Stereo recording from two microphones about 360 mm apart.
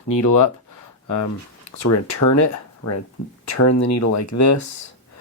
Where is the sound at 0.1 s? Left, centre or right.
Left.